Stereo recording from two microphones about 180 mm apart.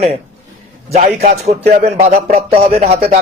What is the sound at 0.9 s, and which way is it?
Speech, 40° right (ahead or behind).